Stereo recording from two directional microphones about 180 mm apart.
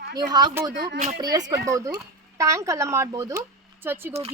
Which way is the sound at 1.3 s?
15° right (ahead or behind).